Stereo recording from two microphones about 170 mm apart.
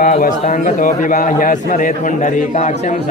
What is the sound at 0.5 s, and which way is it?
A man's voice, 45° left (ahead or behind).